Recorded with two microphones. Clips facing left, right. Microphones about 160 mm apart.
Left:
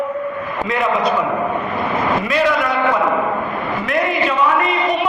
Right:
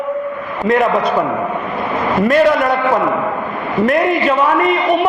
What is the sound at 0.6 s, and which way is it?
Speech, 50° right (ahead or behind).